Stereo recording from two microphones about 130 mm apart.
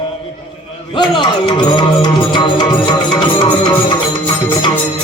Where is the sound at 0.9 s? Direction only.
40° left (ahead or behind).